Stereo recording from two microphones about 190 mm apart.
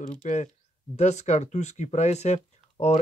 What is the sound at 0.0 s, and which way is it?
Speech, 40° left (ahead or behind).